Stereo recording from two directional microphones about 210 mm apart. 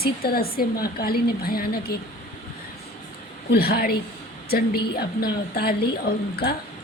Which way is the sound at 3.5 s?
45° left (ahead or behind).